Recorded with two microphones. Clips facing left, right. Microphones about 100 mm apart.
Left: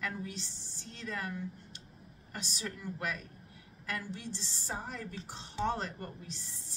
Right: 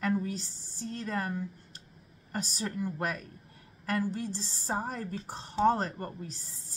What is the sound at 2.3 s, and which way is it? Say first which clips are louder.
A woman's voice: right 7 dB; 45° right (ahead or behind).